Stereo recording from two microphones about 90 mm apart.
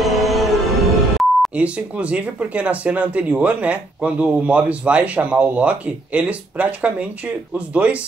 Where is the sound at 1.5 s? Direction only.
15° right (ahead or behind).